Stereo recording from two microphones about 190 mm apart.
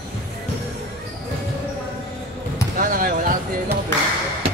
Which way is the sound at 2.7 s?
45° right (ahead or behind).